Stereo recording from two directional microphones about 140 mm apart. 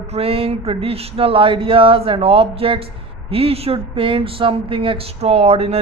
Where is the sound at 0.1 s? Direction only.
45° right (ahead or behind).